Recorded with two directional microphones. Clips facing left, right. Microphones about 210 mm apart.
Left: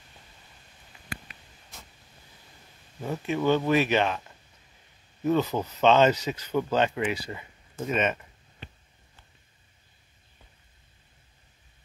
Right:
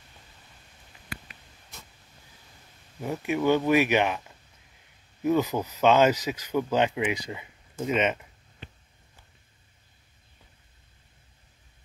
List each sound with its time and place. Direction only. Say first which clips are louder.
3.0 s speech: right 1 dB; 10° right (ahead or behind)
5.2 s speech: even; 10° right (ahead or behind)